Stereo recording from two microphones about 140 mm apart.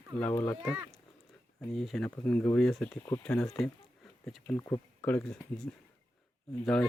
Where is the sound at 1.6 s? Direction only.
5° left (ahead or behind).